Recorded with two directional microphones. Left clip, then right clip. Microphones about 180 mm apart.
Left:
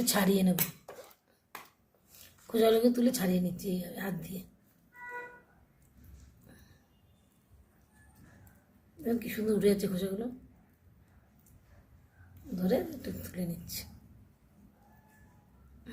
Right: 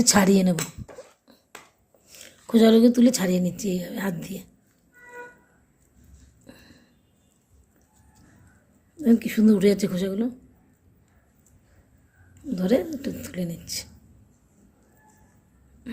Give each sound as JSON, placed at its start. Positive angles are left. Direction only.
{"t": 0.0, "sound": "a woman's voice", "side_deg": -50}
{"t": 2.5, "sound": "a woman's voice", "side_deg": -55}
{"t": 9.0, "sound": "a woman's voice", "side_deg": -50}
{"t": 12.5, "sound": "a woman's voice", "side_deg": -50}